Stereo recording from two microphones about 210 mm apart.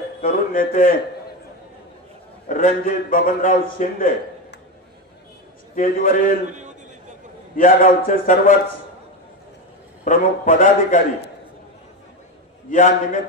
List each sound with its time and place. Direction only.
0.2 s speech: 40° left (ahead or behind)
2.4 s a man's voice: 40° left (ahead or behind)
5.8 s a man's voice: 40° left (ahead or behind)
7.5 s a man's voice: 40° left (ahead or behind)
10.0 s a man's voice: 35° left (ahead or behind)
12.6 s a man's voice: 35° left (ahead or behind)